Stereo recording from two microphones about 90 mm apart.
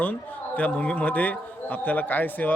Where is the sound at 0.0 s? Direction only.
15° left (ahead or behind).